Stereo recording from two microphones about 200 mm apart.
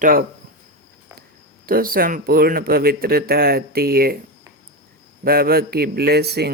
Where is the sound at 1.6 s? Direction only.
45° right (ahead or behind).